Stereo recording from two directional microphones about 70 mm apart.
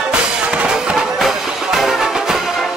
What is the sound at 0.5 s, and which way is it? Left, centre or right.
Music, centre.